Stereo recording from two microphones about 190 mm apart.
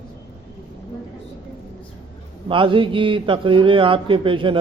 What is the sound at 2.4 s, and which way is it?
A man's voice, 25° right (ahead or behind).